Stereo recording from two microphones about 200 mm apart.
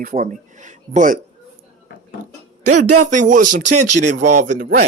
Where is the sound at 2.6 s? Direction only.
40° right (ahead or behind).